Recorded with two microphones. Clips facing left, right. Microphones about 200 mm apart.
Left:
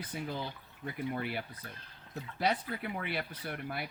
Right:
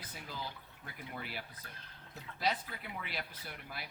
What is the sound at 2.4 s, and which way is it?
Speech, 55° left (ahead or behind).